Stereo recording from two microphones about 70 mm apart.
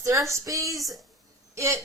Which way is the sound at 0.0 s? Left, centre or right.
Right.